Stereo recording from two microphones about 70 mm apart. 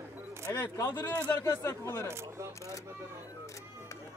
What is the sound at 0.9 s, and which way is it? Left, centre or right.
Speech, left.